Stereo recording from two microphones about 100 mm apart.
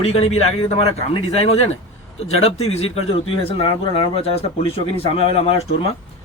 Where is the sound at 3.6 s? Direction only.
60° left (ahead or behind).